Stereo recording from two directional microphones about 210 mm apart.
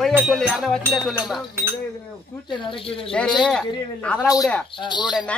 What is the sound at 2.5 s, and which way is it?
Speech, 25° left (ahead or behind).